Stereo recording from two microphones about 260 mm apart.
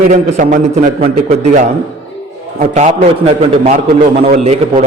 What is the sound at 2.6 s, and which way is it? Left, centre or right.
A man's voice, right.